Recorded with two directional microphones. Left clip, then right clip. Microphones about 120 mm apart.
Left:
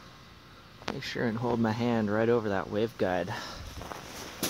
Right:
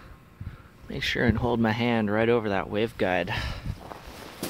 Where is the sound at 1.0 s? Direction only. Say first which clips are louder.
Right 8 dB; 90° right; by 1.5 s 75° right (ahead or behind).